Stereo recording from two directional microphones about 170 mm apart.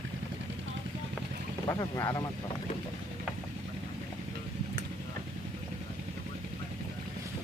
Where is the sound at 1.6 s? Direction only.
20° left (ahead or behind).